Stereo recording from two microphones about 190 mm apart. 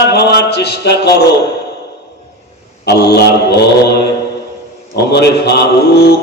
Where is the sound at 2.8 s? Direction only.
60° left (ahead or behind).